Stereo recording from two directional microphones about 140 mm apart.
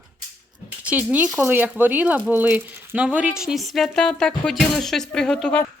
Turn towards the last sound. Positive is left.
turn(degrees=10)  # may be behind; listen again after turning